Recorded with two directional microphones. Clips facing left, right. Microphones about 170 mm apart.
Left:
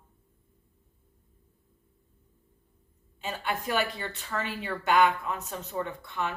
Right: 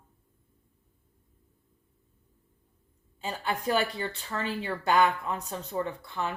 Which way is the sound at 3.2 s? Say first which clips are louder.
Right 1 dB; 30° right (ahead or behind).